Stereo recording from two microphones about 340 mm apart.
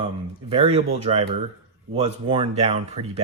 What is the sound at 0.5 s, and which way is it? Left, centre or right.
Speech, centre.